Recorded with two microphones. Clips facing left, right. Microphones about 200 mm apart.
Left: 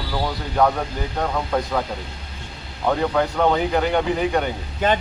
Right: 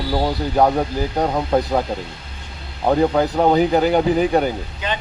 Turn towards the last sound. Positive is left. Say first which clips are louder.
# left 6 dB
turn(degrees=50)  # may be behind; listen again after turning